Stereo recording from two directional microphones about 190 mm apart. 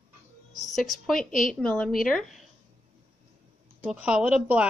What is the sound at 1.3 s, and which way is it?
Speech, 45° left (ahead or behind).